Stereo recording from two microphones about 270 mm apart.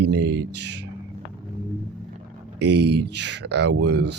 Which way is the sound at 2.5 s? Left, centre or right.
Right.